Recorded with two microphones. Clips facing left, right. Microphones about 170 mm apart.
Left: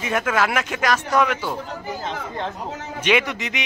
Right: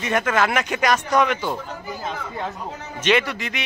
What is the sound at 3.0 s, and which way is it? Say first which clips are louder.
Speech: right 1 dB; 15° left (ahead or behind).